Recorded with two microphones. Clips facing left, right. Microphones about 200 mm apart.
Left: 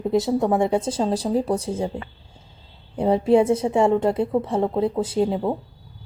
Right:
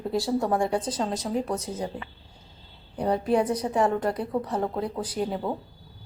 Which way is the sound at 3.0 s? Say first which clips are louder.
Left 6 dB; 25° left (ahead or behind).